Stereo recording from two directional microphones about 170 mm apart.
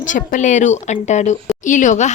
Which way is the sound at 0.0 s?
50° left (ahead or behind).